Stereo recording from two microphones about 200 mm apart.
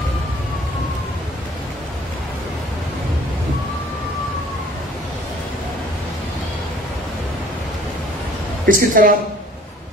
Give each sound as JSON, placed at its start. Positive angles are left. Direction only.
{"t": 8.6, "sound": "a woman's voice", "side_deg": -45}